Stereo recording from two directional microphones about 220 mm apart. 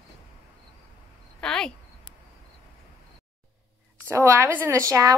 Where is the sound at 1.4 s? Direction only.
5° left (ahead or behind).